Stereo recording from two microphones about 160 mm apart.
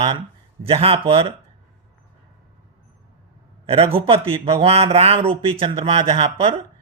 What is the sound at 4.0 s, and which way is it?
Speech, 35° right (ahead or behind).